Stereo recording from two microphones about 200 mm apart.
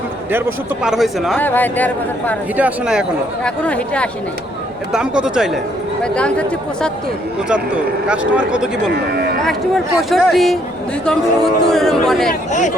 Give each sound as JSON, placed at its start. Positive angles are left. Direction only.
{"t": 0.3, "sound": "speech", "side_deg": -10}
{"t": 1.4, "sound": "a man's voice", "side_deg": 10}
{"t": 2.6, "sound": "speech", "side_deg": -5}
{"t": 8.0, "sound": "speech", "side_deg": -5}
{"t": 12.5, "sound": "speech", "side_deg": 35}